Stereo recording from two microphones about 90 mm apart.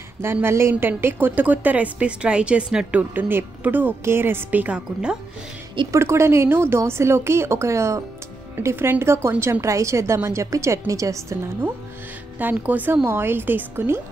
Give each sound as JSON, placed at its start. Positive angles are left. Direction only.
{"t": 0.2, "sound": "a woman's voice", "side_deg": -25}
{"t": 5.9, "sound": "a woman's voice", "side_deg": -30}
{"t": 12.4, "sound": "a woman's voice", "side_deg": -20}